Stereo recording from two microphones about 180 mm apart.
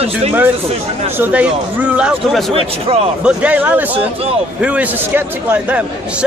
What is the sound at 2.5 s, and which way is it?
Speech, 35° right (ahead or behind).